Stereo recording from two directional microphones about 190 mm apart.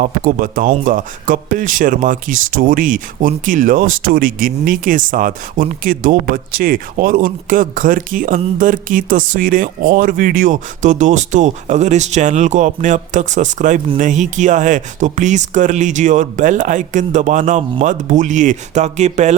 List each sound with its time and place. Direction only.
0.0 s speech: 50° right (ahead or behind)